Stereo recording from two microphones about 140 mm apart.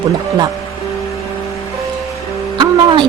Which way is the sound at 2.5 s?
30° right (ahead or behind).